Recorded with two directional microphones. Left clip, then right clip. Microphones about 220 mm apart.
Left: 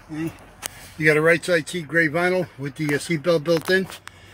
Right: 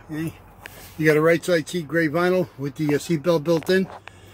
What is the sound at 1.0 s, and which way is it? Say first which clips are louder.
Speech: left 1 dB; 10° right (ahead or behind).